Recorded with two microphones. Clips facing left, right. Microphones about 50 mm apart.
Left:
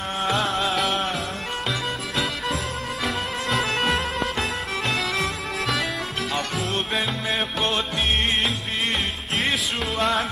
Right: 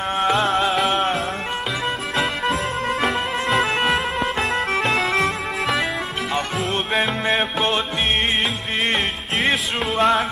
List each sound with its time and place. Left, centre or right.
0.3 s music: centre
3.1 s music: centre
4.7 s music: right
5.1 s music: centre
7.0 s music: right
9.9 s music: centre